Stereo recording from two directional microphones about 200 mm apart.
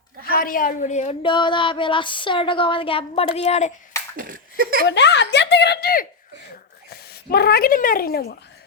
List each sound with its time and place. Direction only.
0.3 s speech: 45° left (ahead or behind); by 3.7 s 30° left (ahead or behind)
4.2 s laughter: 45° right (ahead or behind)
4.9 s speech: 60° left (ahead or behind)